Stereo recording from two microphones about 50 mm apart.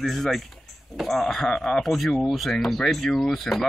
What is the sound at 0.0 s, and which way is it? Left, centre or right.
Speech, centre.